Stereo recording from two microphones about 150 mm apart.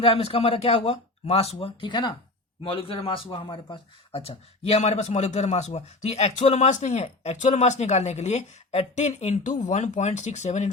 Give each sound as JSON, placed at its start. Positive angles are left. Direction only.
{"t": 0.0, "sound": "a man's voice", "side_deg": 40}